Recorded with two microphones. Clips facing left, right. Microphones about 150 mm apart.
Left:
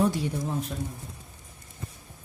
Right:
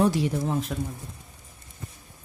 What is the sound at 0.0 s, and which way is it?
Speech, 90° right.